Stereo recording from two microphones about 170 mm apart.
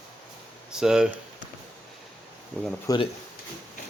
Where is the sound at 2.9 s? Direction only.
20° left (ahead or behind).